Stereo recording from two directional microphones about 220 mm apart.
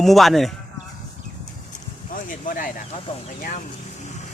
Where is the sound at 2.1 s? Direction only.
40° left (ahead or behind).